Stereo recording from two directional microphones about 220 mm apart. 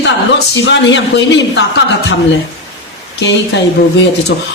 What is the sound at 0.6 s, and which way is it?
Speech, 55° left (ahead or behind).